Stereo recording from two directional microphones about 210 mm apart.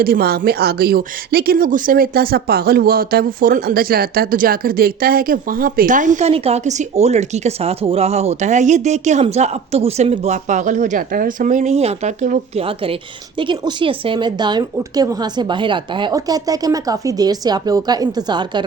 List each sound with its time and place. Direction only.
0.0 s speech: 45° right (ahead or behind); by 18.6 s 20° right (ahead or behind)